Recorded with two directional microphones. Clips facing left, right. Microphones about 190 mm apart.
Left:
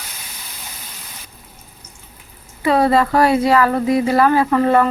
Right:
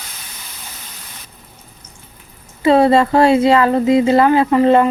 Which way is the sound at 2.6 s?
25° right (ahead or behind).